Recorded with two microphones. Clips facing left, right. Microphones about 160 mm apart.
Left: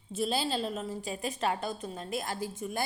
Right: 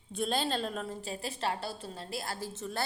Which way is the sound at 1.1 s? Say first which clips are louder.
Left 4 dB; 30° right (ahead or behind).